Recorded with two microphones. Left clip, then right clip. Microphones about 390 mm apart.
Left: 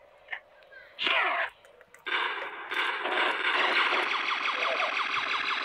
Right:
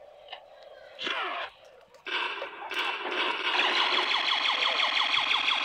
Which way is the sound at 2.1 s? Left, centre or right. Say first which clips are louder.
Left 2 dB; centre.